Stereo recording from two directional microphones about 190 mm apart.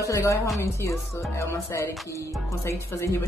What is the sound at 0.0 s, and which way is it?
Speech, 15° left (ahead or behind).